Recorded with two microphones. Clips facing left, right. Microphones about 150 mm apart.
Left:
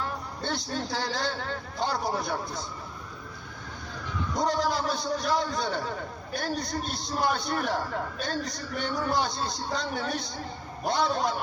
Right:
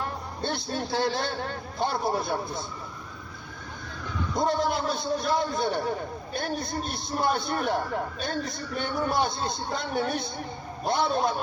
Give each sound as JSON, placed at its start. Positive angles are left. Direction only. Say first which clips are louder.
{"t": 0.0, "sound": "a man's voice", "louder": "right 2 dB", "side_deg": -20}
{"t": 4.4, "sound": "a man's voice", "louder": "right 1 dB", "side_deg": -20}